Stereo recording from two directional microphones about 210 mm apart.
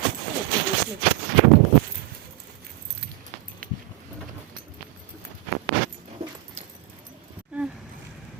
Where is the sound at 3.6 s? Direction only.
45° right (ahead or behind).